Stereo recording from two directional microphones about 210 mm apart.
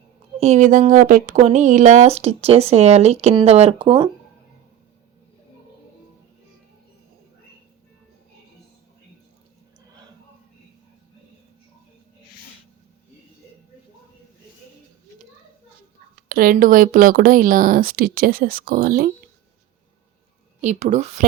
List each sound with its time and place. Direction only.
0.3 s speech: 30° right (ahead or behind)
16.3 s speech: 45° right (ahead or behind)
20.6 s speech: 35° right (ahead or behind)